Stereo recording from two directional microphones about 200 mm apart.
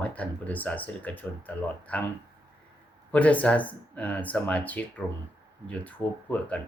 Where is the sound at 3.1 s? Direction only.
5° left (ahead or behind).